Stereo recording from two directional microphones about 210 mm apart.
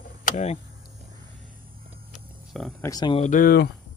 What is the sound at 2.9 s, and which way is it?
Speech, 20° left (ahead or behind).